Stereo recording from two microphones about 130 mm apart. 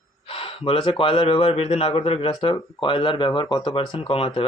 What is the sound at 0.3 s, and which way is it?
Speech, 45° left (ahead or behind).